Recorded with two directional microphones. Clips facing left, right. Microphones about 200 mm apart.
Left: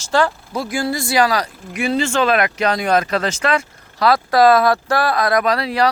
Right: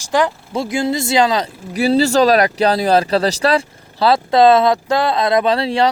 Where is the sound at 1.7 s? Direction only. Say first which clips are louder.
Right 5 dB; 35° right (ahead or behind).